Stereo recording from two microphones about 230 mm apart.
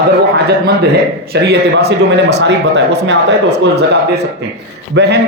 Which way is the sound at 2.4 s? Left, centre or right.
Right.